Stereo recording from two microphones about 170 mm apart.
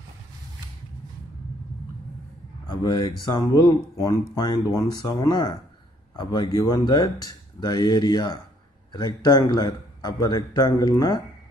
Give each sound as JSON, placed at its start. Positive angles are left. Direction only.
{"t": 2.7, "sound": "a man's voice", "side_deg": 25}